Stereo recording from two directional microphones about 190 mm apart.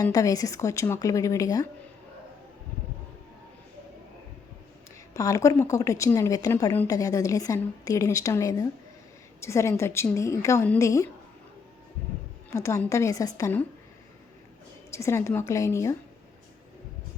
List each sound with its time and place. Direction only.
0.0 s a woman's voice: 20° left (ahead or behind)
5.1 s a woman's voice: 15° left (ahead or behind)
12.5 s a woman's voice: 15° left (ahead or behind)
14.9 s a woman's voice: 15° left (ahead or behind)